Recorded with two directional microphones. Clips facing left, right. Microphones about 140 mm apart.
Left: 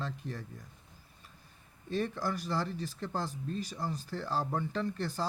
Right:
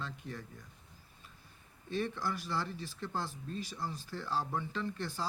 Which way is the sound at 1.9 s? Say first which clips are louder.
Left 2 dB; 40° left (ahead or behind).